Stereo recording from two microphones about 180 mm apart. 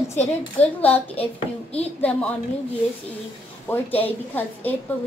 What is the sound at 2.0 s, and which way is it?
Speech, 10° left (ahead or behind).